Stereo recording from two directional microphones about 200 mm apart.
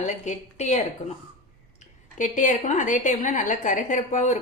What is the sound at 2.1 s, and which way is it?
A woman's voice, 40° left (ahead or behind).